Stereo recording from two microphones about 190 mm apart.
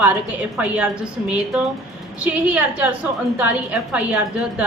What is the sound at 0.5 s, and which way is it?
Speech, 5° right (ahead or behind).